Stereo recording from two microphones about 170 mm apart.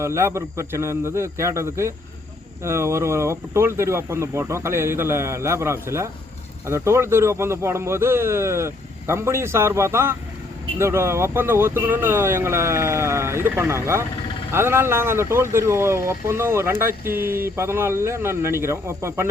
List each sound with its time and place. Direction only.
0.0 s speech: 15° right (ahead or behind)